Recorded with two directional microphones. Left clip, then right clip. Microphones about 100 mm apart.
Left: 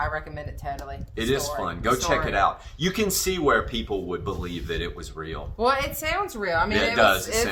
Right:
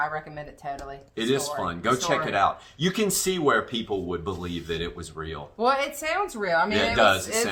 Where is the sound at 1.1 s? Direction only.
10° right (ahead or behind).